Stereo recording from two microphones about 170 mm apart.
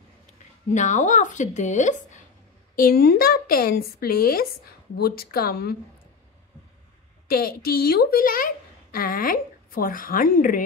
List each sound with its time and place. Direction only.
0.7 s speech: 45° left (ahead or behind)
2.7 s speech: 60° left (ahead or behind)
7.2 s speech: 65° left (ahead or behind)